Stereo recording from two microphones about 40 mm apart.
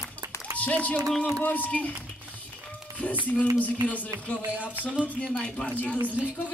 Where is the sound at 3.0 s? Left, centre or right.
Left.